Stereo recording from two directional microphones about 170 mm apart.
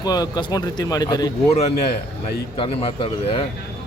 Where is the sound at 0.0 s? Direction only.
25° left (ahead or behind).